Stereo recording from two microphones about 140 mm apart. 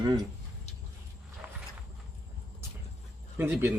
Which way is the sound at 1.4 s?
15° right (ahead or behind).